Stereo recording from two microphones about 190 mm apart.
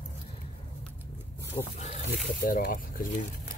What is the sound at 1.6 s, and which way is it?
Speech, 25° left (ahead or behind).